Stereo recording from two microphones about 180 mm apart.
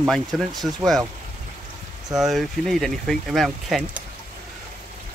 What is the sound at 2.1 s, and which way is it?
Speech, centre (ahead or behind).